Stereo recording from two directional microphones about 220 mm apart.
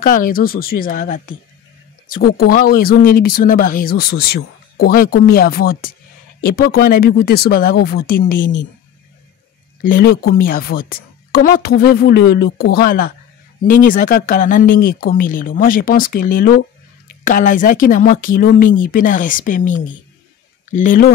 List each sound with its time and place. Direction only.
0.0 s speech: 40° left (ahead or behind)
9.8 s speech: 45° left (ahead or behind)